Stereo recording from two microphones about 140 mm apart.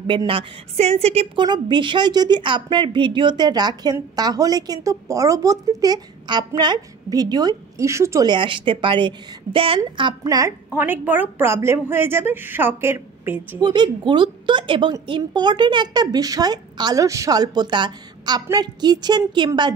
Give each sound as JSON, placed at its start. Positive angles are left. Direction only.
{"t": 0.3, "sound": "a woman's voice", "side_deg": -45}
{"t": 1.4, "sound": "speech", "side_deg": -35}
{"t": 8.3, "sound": "a woman's voice", "side_deg": -35}
{"t": 13.6, "sound": "a woman's voice", "side_deg": -30}